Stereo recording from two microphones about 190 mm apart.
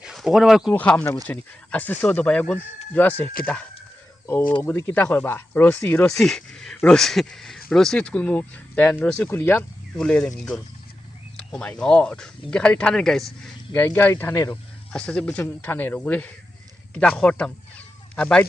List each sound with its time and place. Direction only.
0.0 s speech: 5° right (ahead or behind)